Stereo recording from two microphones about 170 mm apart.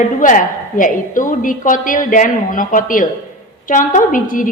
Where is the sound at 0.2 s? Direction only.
50° left (ahead or behind).